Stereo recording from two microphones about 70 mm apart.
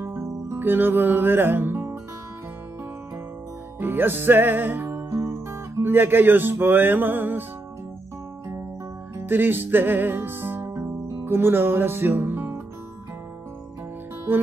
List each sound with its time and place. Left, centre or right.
0.0 s music: right
0.6 s music: right
3.8 s music: right
5.9 s music: right
9.1 s music: right
11.2 s speech: right